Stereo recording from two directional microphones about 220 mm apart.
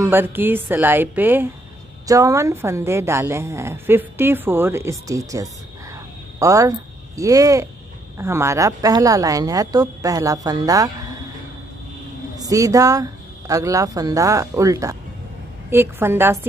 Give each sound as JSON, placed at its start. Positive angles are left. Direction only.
{"t": 0.0, "sound": "a woman's voice", "side_deg": -10}
{"t": 12.4, "sound": "a woman's voice", "side_deg": -15}